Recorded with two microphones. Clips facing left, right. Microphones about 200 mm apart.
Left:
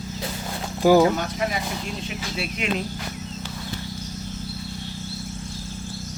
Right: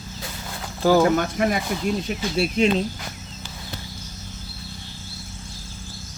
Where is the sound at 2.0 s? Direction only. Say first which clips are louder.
Right 6 dB; 35° right (ahead or behind).